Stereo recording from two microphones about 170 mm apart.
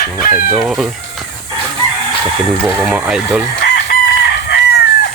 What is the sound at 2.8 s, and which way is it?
Speech, 5° right (ahead or behind).